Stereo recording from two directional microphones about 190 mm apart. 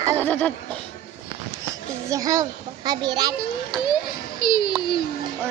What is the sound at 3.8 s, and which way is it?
Children playing, 25° left (ahead or behind).